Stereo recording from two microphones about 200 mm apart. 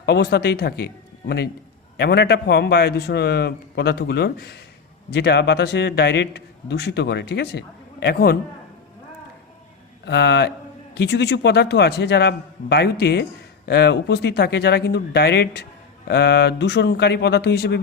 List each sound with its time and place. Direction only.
0.0 s a man's voice: 55° left (ahead or behind)
10.1 s a man's voice: 60° left (ahead or behind)